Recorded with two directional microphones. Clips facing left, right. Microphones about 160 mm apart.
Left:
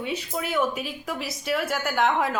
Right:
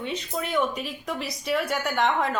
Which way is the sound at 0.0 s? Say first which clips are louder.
Left 1 dB; 5° left (ahead or behind).